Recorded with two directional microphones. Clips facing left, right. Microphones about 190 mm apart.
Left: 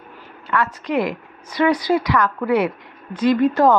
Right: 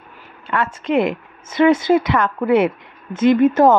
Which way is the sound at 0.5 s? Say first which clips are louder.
Right 2 dB; 25° right (ahead or behind).